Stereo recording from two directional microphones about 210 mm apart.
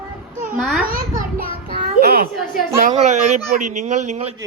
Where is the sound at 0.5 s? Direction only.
Centre (ahead or behind).